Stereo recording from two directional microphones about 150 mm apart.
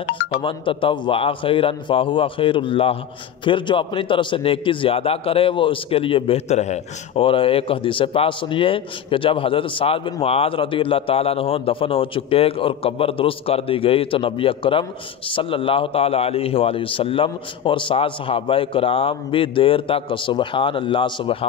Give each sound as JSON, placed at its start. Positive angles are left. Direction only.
{"t": 0.1, "sound": "a man's voice", "side_deg": 35}